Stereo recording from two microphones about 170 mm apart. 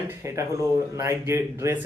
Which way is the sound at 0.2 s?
15° right (ahead or behind).